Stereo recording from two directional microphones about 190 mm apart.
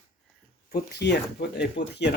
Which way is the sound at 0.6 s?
60° left (ahead or behind).